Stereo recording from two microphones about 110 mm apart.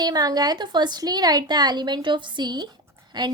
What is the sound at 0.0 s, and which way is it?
A woman's voice, 35° right (ahead or behind).